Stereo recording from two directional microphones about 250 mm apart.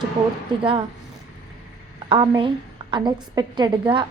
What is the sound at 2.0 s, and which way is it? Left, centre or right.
A woman's voice, centre.